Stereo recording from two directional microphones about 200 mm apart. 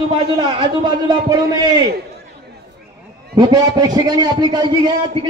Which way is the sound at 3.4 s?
20° right (ahead or behind).